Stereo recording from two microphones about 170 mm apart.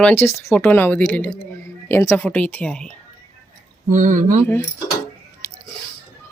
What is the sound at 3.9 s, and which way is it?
Speech, 50° right (ahead or behind).